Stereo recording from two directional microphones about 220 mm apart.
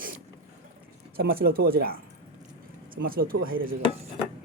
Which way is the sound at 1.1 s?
45° right (ahead or behind).